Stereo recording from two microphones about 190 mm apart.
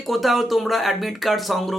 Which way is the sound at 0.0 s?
Centre (ahead or behind).